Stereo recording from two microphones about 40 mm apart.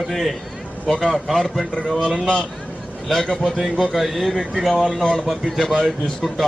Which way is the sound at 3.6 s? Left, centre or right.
Centre.